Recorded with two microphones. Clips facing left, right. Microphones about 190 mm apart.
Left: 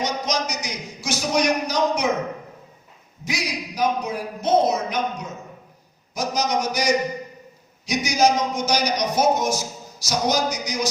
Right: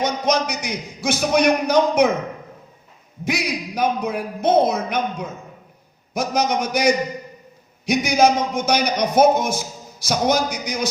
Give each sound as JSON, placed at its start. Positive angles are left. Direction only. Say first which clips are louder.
{"t": 0.0, "sound": "a man's voice", "louder": "right 5 dB", "side_deg": -55}
{"t": 3.2, "sound": "a man's voice", "louder": "right 5 dB", "side_deg": -55}